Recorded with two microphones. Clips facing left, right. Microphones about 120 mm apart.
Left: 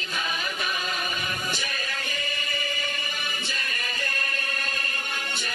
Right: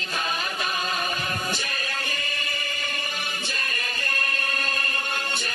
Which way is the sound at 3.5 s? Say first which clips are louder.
Right 1 dB; 50° right (ahead or behind).